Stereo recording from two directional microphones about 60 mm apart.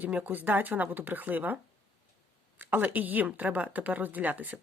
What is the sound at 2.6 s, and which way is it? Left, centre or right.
Speech, right.